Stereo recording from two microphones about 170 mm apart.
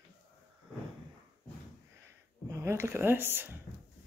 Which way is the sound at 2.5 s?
15° right (ahead or behind).